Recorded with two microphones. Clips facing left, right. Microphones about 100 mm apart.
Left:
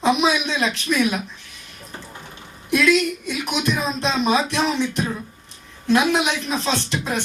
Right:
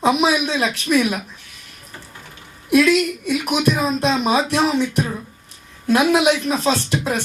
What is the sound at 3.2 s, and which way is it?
Speech, 45° right (ahead or behind).